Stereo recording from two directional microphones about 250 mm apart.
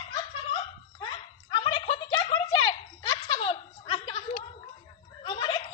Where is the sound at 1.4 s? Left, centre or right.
Centre.